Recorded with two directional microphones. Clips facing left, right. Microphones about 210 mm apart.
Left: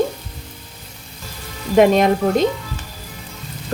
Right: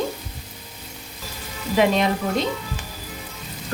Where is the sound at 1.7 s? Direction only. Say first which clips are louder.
Left 6 dB; 50° left (ahead or behind).